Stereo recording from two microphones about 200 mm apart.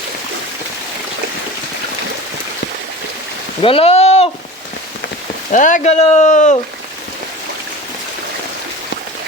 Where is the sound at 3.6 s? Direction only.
30° left (ahead or behind).